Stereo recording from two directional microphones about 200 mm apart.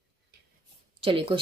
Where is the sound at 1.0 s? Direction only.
25° right (ahead or behind).